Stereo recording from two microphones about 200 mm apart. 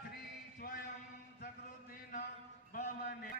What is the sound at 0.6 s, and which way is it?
Speech, 50° left (ahead or behind).